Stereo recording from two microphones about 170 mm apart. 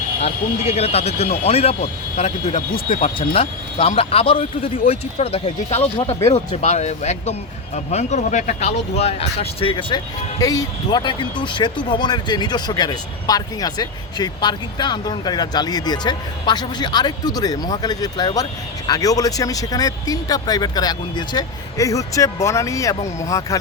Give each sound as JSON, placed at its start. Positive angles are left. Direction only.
{"t": 0.2, "sound": "speech", "side_deg": 40}
{"t": 3.2, "sound": "speech", "side_deg": 35}